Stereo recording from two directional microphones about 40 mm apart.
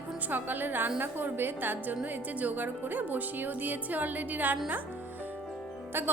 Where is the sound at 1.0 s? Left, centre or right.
Right.